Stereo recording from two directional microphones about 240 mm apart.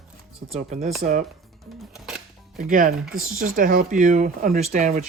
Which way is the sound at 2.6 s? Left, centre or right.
Right.